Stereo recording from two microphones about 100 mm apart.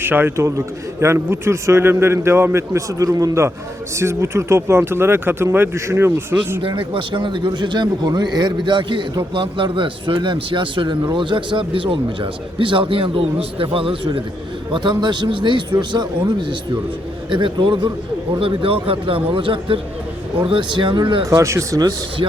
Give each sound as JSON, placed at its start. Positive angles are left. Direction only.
{"t": 0.0, "sound": "a man's voice", "side_deg": -20}
{"t": 6.6, "sound": "a man's voice", "side_deg": -60}
{"t": 14.7, "sound": "a man's voice", "side_deg": -50}
{"t": 17.2, "sound": "a man's voice", "side_deg": -55}
{"t": 18.3, "sound": "a man's voice", "side_deg": -65}
{"t": 21.2, "sound": "speech", "side_deg": -30}